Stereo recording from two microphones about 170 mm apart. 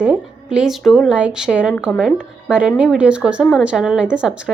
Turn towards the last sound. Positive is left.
turn(degrees=-5)  # may be behind; listen again after turning